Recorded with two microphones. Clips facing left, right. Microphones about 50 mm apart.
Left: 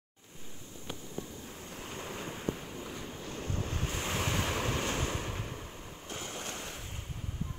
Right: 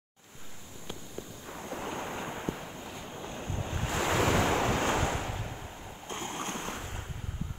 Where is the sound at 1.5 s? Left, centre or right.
Right.